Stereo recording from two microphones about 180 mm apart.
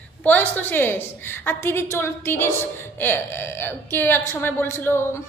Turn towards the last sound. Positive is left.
turn(degrees=15)  # may be behind; listen again after turning